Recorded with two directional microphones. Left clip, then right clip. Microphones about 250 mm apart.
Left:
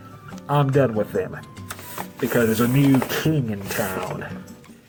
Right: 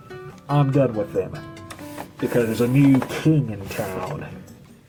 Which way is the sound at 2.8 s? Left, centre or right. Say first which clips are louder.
Right 1 dB; left.